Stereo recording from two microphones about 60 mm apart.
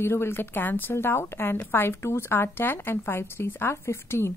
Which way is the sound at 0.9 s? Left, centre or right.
Left.